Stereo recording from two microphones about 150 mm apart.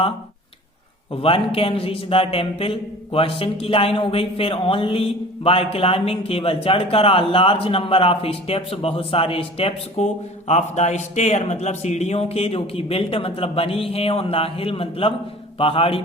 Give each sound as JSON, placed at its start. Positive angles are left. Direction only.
{"t": 1.1, "sound": "a man's voice", "side_deg": 40}